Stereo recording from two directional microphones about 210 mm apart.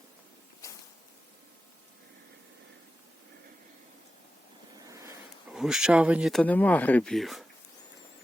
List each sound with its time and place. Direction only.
0.6 s mechanisms: 15° left (ahead or behind)
5.5 s speech: 5° right (ahead or behind)